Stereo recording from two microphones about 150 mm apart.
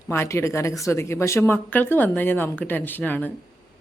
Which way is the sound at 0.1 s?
15° left (ahead or behind).